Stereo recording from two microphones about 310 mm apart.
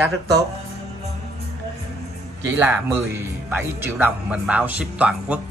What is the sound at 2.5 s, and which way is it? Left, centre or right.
Speech, centre.